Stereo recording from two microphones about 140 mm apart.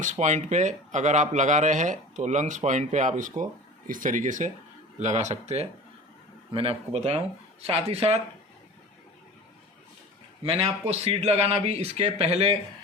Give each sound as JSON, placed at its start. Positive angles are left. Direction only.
{"t": 0.0, "sound": "speech", "side_deg": -60}
{"t": 10.4, "sound": "speech", "side_deg": -45}